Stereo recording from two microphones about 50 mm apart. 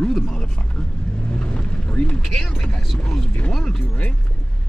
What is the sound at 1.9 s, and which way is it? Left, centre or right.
Speech, left.